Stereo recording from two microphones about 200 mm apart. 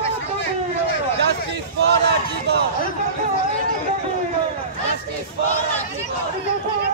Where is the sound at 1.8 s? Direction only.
55° right (ahead or behind).